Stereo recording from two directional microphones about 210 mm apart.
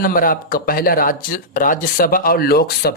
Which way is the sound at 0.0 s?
40° left (ahead or behind).